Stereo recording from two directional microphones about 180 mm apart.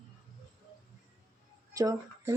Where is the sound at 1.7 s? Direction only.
15° right (ahead or behind).